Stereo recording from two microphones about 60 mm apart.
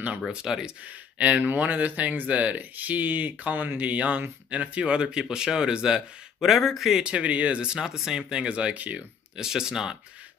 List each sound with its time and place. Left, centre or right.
0.3 s speech: centre
1.1 s speech: right
6.5 s speech: centre
7.0 s speech: centre
9.4 s speech: centre